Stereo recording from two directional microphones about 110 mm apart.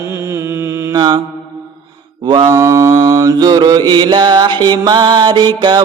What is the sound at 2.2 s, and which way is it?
Mantra, 40° right (ahead or behind).